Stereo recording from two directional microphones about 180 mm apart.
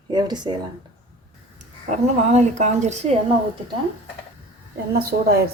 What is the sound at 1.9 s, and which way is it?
A woman's voice, 40° right (ahead or behind).